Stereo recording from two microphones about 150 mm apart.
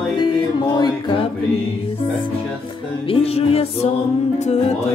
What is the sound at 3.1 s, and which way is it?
Music, 40° left (ahead or behind).